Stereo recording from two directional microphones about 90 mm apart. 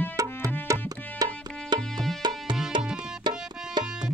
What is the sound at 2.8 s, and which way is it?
Tabla, 10° right (ahead or behind).